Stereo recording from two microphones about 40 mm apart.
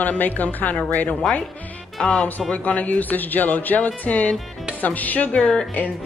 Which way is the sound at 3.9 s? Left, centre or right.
Left.